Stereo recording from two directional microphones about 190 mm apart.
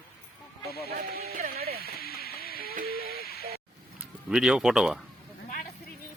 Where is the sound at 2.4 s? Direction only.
50° right (ahead or behind).